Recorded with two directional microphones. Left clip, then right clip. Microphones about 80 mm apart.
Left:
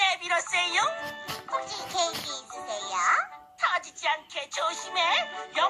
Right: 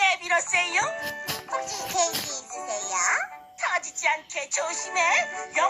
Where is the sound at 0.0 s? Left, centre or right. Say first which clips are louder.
Right 3 dB; centre.